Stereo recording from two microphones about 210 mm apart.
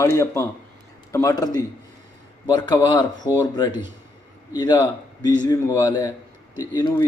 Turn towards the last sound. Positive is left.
turn(degrees=20)  # may be behind; listen again after turning